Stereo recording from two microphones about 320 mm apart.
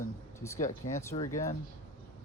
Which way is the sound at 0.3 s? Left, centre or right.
Centre.